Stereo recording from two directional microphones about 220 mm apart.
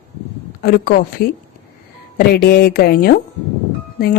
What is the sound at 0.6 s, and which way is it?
Speech, 40° left (ahead or behind).